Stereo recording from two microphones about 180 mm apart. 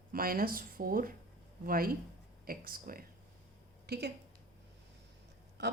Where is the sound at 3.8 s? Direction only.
65° right (ahead or behind).